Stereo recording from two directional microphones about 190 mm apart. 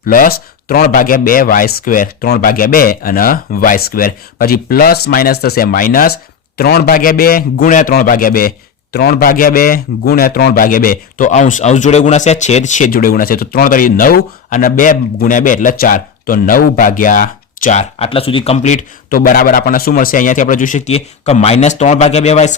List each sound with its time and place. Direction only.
0.0 s a man's voice: 45° left (ahead or behind)